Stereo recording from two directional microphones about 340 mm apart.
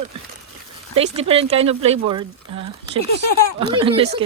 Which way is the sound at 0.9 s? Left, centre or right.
Centre.